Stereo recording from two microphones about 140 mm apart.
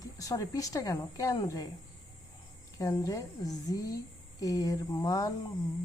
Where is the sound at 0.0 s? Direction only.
25° left (ahead or behind).